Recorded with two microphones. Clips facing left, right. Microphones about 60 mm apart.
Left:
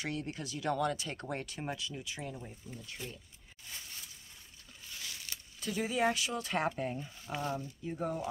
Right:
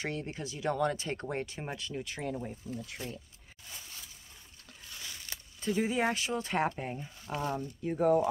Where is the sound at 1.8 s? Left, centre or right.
Right.